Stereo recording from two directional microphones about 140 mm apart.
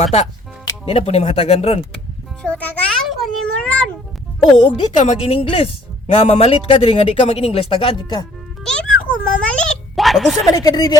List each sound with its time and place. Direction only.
0.0 s speech: 50° left (ahead or behind)
2.4 s music: 10° left (ahead or behind)
3.1 s speech: centre (ahead or behind)
4.5 s speech: 45° left (ahead or behind)
8.6 s a sound: 5° left (ahead or behind)
10.5 s speech: 25° left (ahead or behind)